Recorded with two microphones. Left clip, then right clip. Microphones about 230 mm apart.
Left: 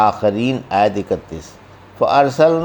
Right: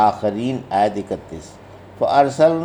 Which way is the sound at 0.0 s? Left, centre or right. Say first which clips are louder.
Left 2 dB; left.